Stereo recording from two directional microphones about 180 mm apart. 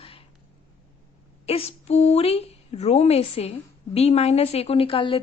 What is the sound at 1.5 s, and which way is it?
Speech, 35° left (ahead or behind).